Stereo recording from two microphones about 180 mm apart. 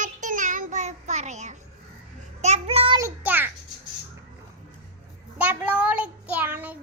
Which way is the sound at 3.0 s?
15° right (ahead or behind).